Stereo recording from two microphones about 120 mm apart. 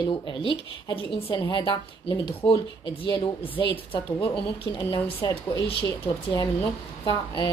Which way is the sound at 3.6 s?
45° left (ahead or behind).